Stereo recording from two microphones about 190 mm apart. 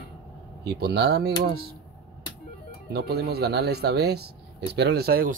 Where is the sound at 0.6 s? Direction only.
60° right (ahead or behind).